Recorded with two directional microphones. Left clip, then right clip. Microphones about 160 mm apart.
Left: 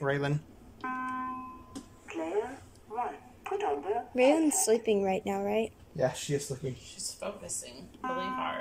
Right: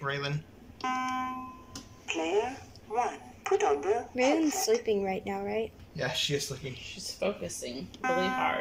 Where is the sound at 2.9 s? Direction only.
Centre (ahead or behind).